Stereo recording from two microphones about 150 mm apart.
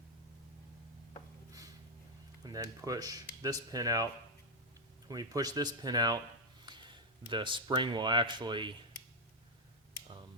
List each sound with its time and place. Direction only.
2.4 s speech: 25° right (ahead or behind)